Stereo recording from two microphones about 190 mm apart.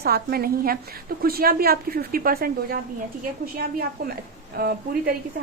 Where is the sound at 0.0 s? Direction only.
55° right (ahead or behind).